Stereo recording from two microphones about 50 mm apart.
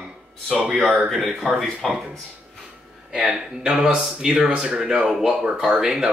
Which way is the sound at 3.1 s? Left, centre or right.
Centre.